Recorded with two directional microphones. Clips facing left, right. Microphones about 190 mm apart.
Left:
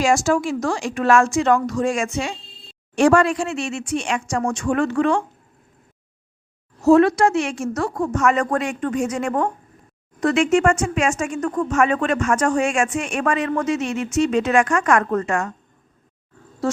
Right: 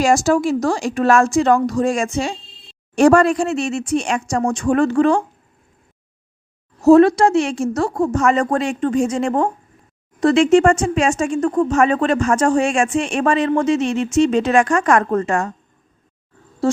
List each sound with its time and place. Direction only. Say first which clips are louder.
0.0 s speech: right 3 dB; 35° right (ahead or behind)
6.8 s speech: right 4 dB; 35° right (ahead or behind)